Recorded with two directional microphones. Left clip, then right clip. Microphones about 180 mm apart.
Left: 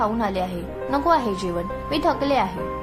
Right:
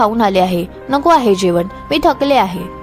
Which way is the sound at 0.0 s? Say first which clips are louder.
Right 11 dB; 45° right (ahead or behind).